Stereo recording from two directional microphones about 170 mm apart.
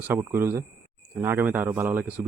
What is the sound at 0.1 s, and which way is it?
A man's voice, 15° right (ahead or behind).